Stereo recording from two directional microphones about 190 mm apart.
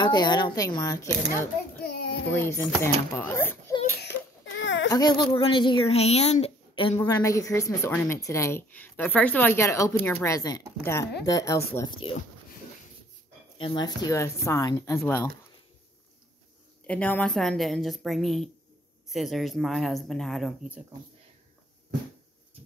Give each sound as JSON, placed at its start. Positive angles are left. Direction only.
{"t": 0.0, "sound": "speech", "side_deg": 25}
{"t": 2.2, "sound": "a woman's voice", "side_deg": 10}
{"t": 4.6, "sound": "a sound", "side_deg": 80}
{"t": 4.9, "sound": "speech", "side_deg": 20}
{"t": 7.0, "sound": "a woman's voice", "side_deg": 20}
{"t": 13.6, "sound": "a woman's voice", "side_deg": 25}
{"t": 16.8, "sound": "speech", "side_deg": 5}